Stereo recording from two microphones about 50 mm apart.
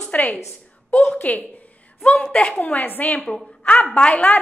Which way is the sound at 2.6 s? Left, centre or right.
Left.